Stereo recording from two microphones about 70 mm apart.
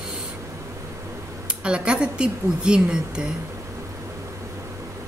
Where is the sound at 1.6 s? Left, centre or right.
Centre.